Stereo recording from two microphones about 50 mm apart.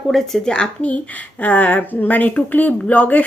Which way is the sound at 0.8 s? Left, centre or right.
Left.